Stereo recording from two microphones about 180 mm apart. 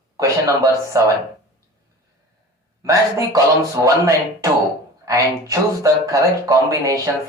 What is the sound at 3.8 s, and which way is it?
Speech, 20° right (ahead or behind).